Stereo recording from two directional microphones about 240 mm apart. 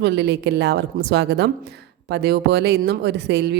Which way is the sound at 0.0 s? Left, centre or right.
Right.